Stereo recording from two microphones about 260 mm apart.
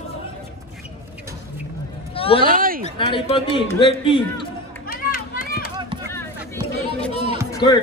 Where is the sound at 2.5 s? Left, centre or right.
Right.